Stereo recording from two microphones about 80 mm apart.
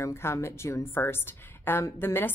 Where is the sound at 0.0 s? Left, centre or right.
Left.